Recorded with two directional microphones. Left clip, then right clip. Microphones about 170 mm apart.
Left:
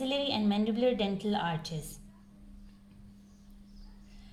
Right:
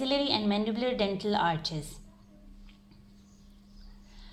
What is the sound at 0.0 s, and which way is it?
A woman's voice, 35° right (ahead or behind).